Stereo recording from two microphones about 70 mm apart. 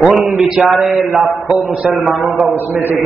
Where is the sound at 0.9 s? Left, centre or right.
Centre.